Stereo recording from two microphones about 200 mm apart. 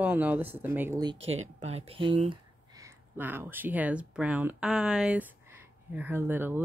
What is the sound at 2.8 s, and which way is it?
Speech, 10° right (ahead or behind).